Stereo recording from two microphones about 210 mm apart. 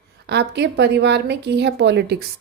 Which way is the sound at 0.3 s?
55° right (ahead or behind).